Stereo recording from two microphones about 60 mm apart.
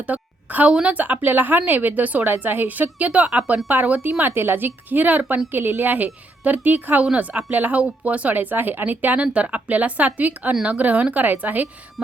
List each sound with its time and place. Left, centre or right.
0.1 s a woman's voice: right